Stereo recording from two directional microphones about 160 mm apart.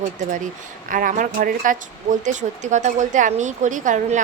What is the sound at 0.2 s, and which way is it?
A woman's voice, 55° right (ahead or behind).